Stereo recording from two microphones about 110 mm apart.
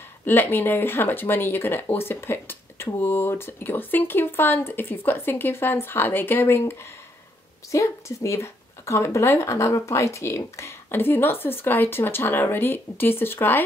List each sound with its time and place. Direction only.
0.2 s speech: 20° left (ahead or behind)